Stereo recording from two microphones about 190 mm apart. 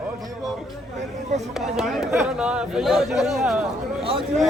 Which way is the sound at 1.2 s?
35° right (ahead or behind).